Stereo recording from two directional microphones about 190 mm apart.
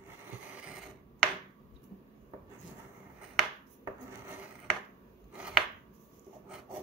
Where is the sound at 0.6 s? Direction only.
5° right (ahead or behind).